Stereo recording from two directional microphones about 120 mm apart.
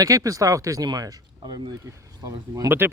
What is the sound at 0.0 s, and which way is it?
Speech, 30° right (ahead or behind).